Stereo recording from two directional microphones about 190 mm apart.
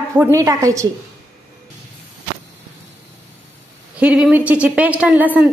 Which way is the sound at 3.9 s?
5° right (ahead or behind).